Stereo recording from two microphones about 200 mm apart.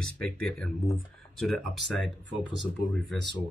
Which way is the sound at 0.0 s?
5° left (ahead or behind).